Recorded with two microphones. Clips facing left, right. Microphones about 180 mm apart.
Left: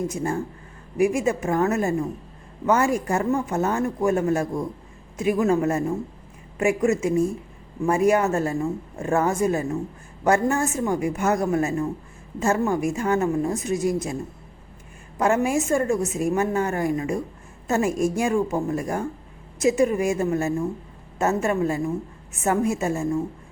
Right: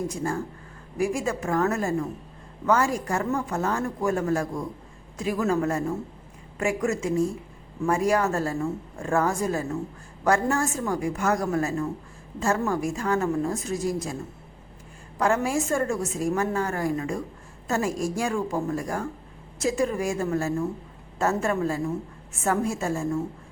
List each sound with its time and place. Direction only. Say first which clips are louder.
0.9 s a woman's voice: left 5 dB; 20° left (ahead or behind)
15.2 s a woman's voice: left 3 dB; 20° left (ahead or behind)